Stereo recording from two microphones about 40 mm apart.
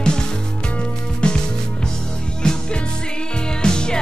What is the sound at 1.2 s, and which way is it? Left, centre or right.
Music, left.